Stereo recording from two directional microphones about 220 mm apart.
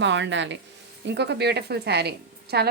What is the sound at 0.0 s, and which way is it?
Speech, 55° right (ahead or behind).